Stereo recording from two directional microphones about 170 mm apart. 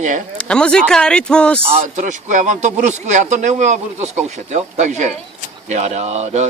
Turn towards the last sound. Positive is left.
turn(degrees=-40)  # may be behind; listen again after turning